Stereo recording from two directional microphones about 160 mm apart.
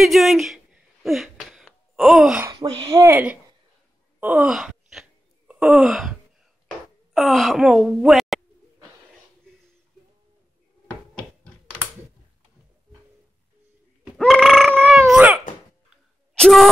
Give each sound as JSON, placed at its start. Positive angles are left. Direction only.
{"t": 0.0, "sound": "speech", "side_deg": 0}
{"t": 1.0, "sound": "gasp", "side_deg": 0}
{"t": 2.5, "sound": "speech", "side_deg": -30}
{"t": 3.0, "sound": "speech", "side_deg": -10}
{"t": 4.2, "sound": "wail", "side_deg": -10}
{"t": 7.2, "sound": "speech", "side_deg": 0}
{"t": 14.1, "sound": "a sound", "side_deg": 0}
{"t": 14.8, "sound": "dog", "side_deg": 0}
{"t": 16.3, "sound": "a sound", "side_deg": 5}